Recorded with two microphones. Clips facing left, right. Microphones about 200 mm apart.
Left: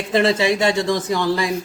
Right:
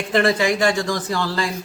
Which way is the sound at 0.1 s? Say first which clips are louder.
Left 1 dB; 25° left (ahead or behind).